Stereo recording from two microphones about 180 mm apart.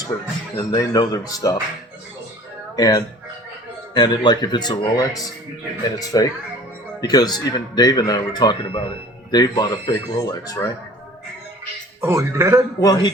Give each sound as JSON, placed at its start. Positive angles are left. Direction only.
{"t": 0.0, "sound": "speech", "side_deg": 20}
{"t": 2.7, "sound": "speech", "side_deg": 20}
{"t": 11.9, "sound": "a man's voice", "side_deg": -15}
{"t": 12.8, "sound": "speech", "side_deg": 20}